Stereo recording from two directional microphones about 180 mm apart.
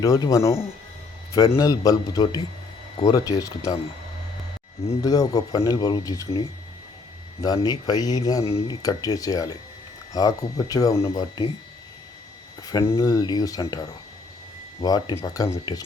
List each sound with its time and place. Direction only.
0.0 s speech: 20° left (ahead or behind)
4.9 s speech: 20° left (ahead or behind)
7.4 s speech: 20° left (ahead or behind)
12.7 s speech: 20° left (ahead or behind)